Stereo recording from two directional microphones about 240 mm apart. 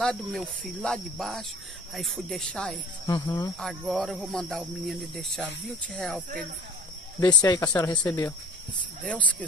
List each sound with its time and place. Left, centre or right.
0.0 s speech: centre
3.1 s speech: centre
3.5 s speech: centre
7.2 s speech: centre